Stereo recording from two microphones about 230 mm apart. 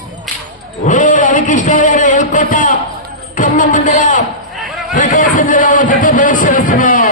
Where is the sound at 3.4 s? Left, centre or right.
Left.